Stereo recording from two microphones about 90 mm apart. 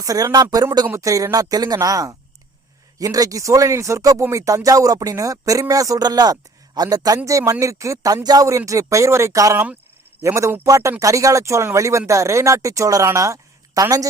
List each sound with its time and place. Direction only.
0.0 s speech: 40° right (ahead or behind)